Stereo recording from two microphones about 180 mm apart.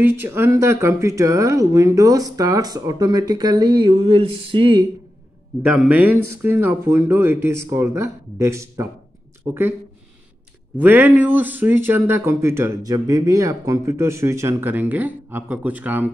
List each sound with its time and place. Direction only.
0.0 s speech: 10° right (ahead or behind)
5.6 s speech: 10° right (ahead or behind)
10.8 s speech: 10° right (ahead or behind)